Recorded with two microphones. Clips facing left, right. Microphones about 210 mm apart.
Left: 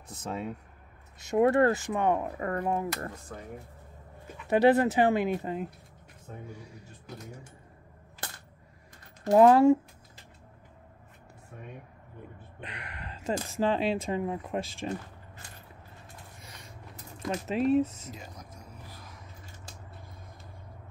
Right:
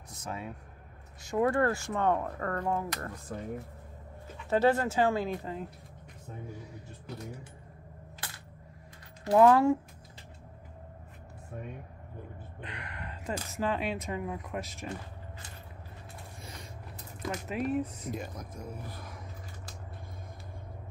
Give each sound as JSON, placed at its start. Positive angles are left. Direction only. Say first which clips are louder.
{"t": 0.1, "sound": "speech", "louder": "left 4 dB", "side_deg": 25}
{"t": 4.5, "sound": "speech", "louder": "left 4 dB", "side_deg": 15}
{"t": 9.3, "sound": "speech", "louder": "left 3 dB", "side_deg": 25}
{"t": 11.5, "sound": "speech", "louder": "right 5 dB", "side_deg": -40}
{"t": 12.5, "sound": "speech", "louder": "even", "side_deg": 20}
{"t": 17.3, "sound": "speech", "louder": "left 6 dB", "side_deg": 25}
{"t": 18.1, "sound": "speech", "louder": "right 7 dB", "side_deg": -55}